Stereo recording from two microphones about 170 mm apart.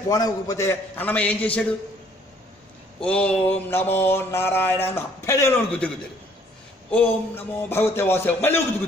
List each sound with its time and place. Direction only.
0.1 s mantra: 20° left (ahead or behind)
3.0 s mantra: 5° left (ahead or behind)
5.7 s mantra: 5° left (ahead or behind)